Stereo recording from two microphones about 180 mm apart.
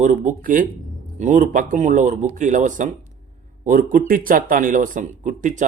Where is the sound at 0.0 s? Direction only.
45° right (ahead or behind).